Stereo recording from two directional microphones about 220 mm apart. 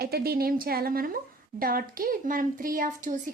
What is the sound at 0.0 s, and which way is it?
A woman's voice, 45° right (ahead or behind).